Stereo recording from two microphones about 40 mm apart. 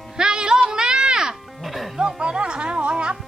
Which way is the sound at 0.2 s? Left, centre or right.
Right.